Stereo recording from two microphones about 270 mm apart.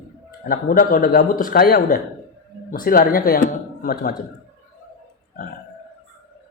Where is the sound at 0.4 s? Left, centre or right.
Left.